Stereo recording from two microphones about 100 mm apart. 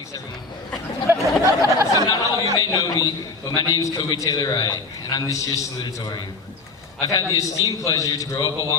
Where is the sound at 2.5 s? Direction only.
40° left (ahead or behind).